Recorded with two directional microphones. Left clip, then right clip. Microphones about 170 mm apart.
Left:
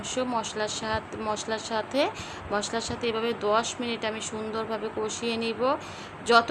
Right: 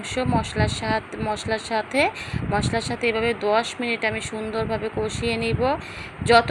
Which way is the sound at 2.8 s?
55° left (ahead or behind).